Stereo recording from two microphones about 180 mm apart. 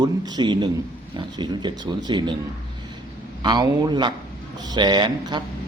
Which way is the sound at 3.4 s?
25° right (ahead or behind).